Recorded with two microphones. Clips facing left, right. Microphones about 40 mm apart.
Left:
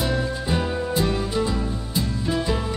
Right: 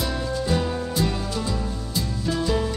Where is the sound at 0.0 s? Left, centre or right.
Centre.